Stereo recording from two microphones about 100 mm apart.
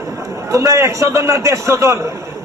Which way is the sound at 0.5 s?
30° right (ahead or behind).